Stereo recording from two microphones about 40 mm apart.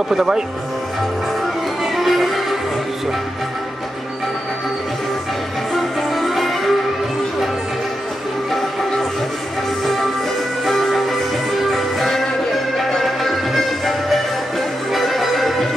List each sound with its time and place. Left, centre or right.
0.1 s speech: centre
2.0 s music: centre
5.8 s music: centre
10.6 s music: centre